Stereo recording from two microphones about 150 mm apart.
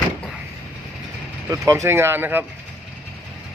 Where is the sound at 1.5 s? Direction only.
20° right (ahead or behind).